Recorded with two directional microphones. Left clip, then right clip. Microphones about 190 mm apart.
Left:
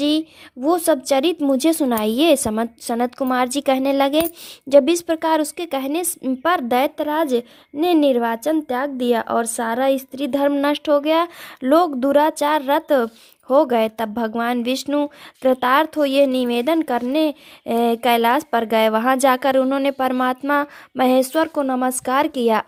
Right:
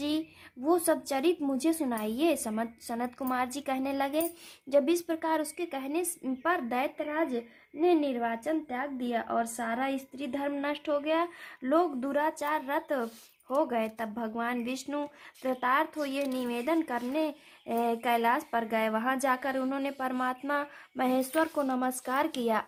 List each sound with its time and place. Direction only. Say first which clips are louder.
0.0 s a woman's voice: left 13 dB; 45° left (ahead or behind)